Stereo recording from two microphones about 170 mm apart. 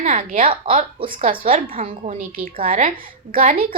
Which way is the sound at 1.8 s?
40° right (ahead or behind).